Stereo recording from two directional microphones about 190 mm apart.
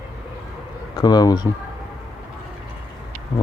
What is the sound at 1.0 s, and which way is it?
Speech, 20° left (ahead or behind).